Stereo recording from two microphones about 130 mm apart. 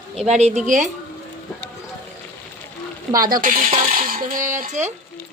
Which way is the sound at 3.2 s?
90° right.